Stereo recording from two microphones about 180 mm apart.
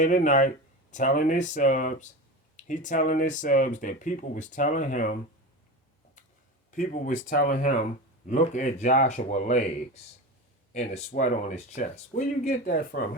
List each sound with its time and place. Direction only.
0.0 s speech: 45° left (ahead or behind)
6.7 s speech: 45° left (ahead or behind)
10.8 s speech: 40° left (ahead or behind)